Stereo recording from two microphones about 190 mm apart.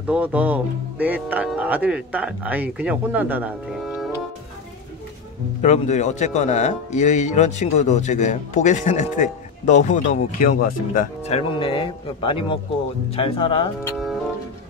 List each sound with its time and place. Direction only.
0.1 s speech: 10° right (ahead or behind)
5.6 s speech: 40° left (ahead or behind)
13.9 s music: centre (ahead or behind)